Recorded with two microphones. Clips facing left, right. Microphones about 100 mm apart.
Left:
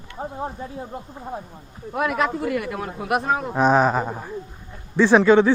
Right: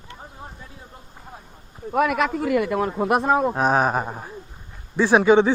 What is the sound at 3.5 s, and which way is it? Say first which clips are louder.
Speech: left 2 dB; 5° right (ahead or behind).